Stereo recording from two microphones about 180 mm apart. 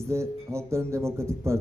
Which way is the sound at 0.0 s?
15° right (ahead or behind).